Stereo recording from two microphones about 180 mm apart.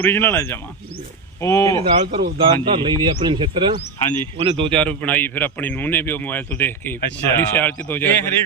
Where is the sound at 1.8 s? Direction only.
30° right (ahead or behind).